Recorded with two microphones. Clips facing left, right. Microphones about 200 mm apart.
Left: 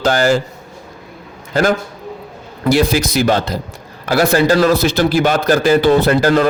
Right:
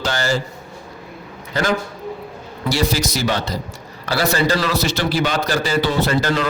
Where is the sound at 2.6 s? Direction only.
55° left (ahead or behind).